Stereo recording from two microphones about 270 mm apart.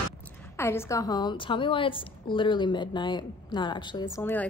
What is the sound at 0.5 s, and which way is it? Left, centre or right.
A woman's voice, centre.